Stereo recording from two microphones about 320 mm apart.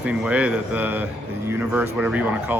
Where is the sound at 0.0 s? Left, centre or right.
Centre.